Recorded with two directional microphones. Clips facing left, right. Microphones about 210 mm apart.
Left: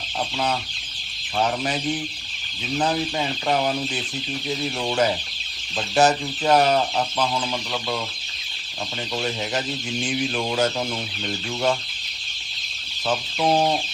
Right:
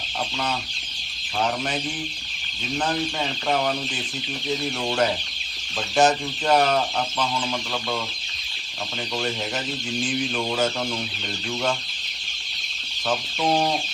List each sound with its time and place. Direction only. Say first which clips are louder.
6.0 s speech: left 1 dB; 5° left (ahead or behind)
10.1 s speech: left 2 dB; 5° left (ahead or behind)